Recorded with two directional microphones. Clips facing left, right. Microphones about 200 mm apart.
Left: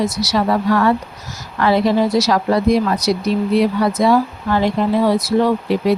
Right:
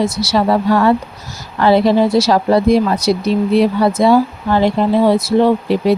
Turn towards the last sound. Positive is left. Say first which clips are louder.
# right 3 dB
turn(degrees=-25)  # may be behind; listen again after turning